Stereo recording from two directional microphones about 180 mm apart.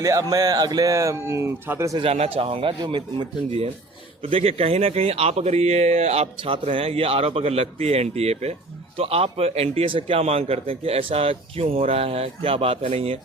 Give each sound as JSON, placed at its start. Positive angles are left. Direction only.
{"t": 0.0, "sound": "speech", "side_deg": -20}
{"t": 2.0, "sound": "speech", "side_deg": -35}